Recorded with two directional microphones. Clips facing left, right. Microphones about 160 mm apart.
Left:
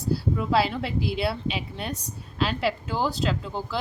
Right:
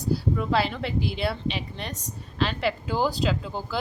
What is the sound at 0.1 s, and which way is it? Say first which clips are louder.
Speech: even; 5° left (ahead or behind).